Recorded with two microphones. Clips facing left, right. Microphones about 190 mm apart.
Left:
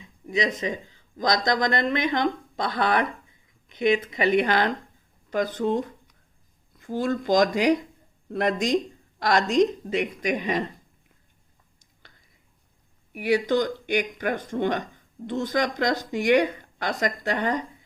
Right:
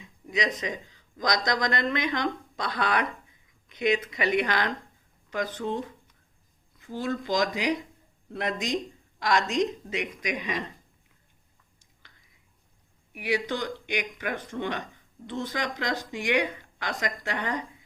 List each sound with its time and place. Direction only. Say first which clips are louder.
0.3 s speech: left 4 dB; 25° left (ahead or behind)
13.1 s speech: left 7 dB; 45° left (ahead or behind)